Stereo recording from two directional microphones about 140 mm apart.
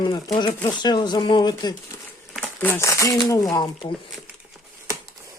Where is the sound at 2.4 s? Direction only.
15° left (ahead or behind).